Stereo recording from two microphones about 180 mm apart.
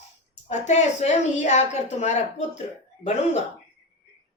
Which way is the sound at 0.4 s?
40° left (ahead or behind).